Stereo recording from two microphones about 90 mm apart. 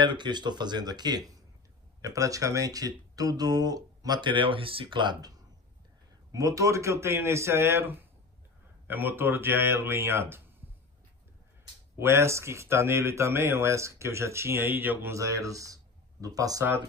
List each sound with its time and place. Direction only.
0.0 s speech: 60° right (ahead or behind)
2.0 s speech: 40° right (ahead or behind); by 5.3 s 60° right (ahead or behind)
6.3 s speech: 35° right (ahead or behind)
12.0 s speech: 30° right (ahead or behind)
15.1 s speech: 35° right (ahead or behind)